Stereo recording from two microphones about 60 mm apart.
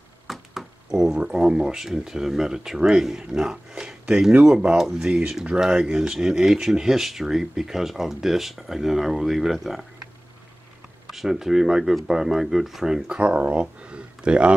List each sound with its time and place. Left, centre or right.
0.3 s speech: centre
11.1 s speech: centre
13.0 s speech: right